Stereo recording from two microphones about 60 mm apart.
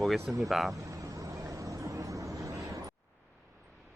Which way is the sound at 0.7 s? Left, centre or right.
Right.